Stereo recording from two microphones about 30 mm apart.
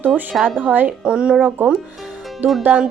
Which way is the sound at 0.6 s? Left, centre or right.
Right.